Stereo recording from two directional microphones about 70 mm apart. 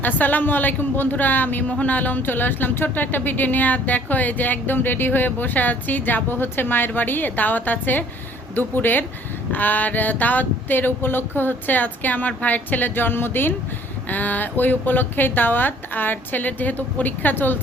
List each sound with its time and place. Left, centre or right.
0.0 s a woman's voice: left